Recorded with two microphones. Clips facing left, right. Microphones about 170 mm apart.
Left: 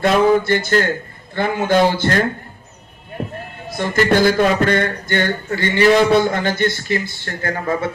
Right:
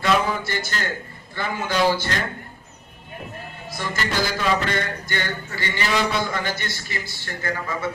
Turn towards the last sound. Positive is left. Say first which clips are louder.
# left 6 dB
turn(degrees=50)  # may be behind; listen again after turning